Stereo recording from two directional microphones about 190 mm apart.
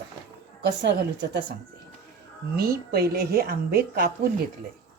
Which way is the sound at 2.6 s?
55° right (ahead or behind).